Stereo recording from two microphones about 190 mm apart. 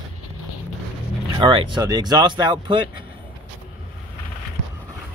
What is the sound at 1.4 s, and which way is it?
Speech, 25° right (ahead or behind).